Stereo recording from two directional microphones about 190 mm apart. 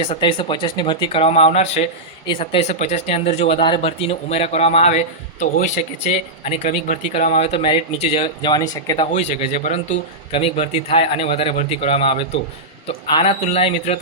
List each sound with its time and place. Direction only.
0.0 s speech: 30° left (ahead or behind)
8.4 s speech: 20° left (ahead or behind)
9.1 s speech: 40° left (ahead or behind)